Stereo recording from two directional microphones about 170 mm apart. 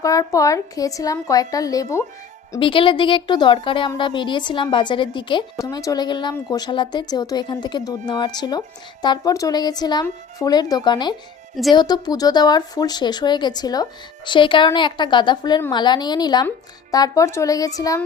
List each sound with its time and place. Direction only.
0.0 s speech: 20° left (ahead or behind)
2.6 s speech: 30° left (ahead or behind)